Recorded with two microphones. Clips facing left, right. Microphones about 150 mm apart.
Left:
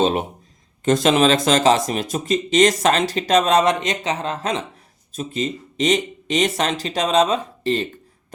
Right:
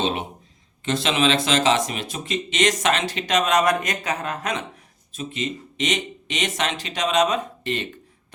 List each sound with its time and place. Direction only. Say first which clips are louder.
0.0 s speech: left 6 dB; 45° left (ahead or behind)